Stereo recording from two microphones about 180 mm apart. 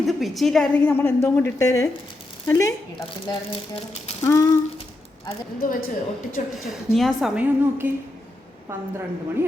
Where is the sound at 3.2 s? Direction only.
30° left (ahead or behind).